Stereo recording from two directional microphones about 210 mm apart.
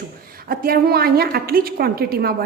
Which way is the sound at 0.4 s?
45° right (ahead or behind).